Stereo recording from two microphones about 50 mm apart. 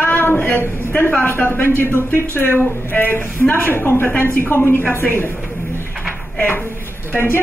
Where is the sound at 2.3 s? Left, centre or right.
Left.